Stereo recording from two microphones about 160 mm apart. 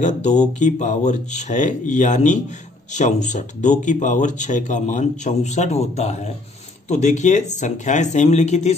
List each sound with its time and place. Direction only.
0.0 s speech: 45° left (ahead or behind)